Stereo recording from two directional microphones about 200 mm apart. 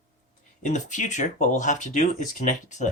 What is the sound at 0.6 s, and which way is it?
Speech, 40° left (ahead or behind).